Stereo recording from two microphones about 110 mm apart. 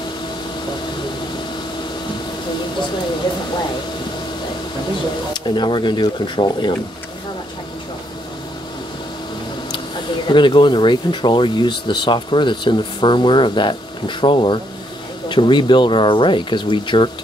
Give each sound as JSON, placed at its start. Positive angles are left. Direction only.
{"t": 5.3, "sound": "speech", "side_deg": 45}
{"t": 10.2, "sound": "speech", "side_deg": 45}